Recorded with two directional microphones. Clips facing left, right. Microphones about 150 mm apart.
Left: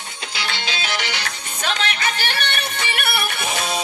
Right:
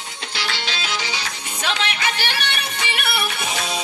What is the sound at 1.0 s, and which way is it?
Music, 65° left (ahead or behind).